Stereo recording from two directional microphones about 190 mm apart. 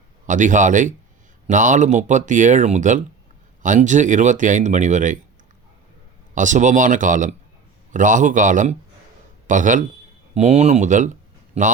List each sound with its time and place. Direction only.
0.3 s speech: 40° right (ahead or behind)
6.3 s speech: 40° right (ahead or behind)